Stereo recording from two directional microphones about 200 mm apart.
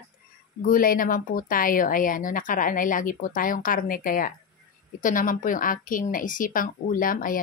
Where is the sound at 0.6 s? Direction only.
45° left (ahead or behind).